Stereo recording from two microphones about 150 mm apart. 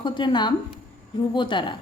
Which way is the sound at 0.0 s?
30° left (ahead or behind).